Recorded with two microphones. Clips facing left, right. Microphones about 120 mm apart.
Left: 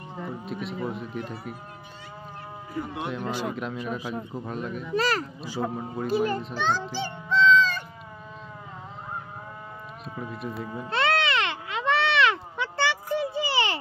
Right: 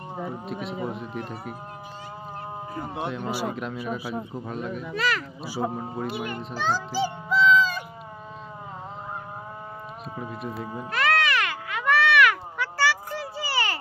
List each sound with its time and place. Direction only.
0.2 s speech: centre (ahead or behind)
2.7 s speech: 30° right (ahead or behind)
3.1 s speech: 5° right (ahead or behind)
4.9 s speech: 40° left (ahead or behind)
5.6 s speech: centre (ahead or behind)
6.1 s speech: 35° left (ahead or behind)
6.4 s speech: 5° right (ahead or behind)
6.9 s music: 5° right (ahead or behind)
10.3 s speech: centre (ahead or behind)
10.9 s a sound: 25° left (ahead or behind)